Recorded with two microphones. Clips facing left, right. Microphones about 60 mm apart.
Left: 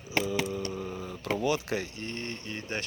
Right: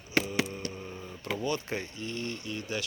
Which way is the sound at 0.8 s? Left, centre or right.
Left.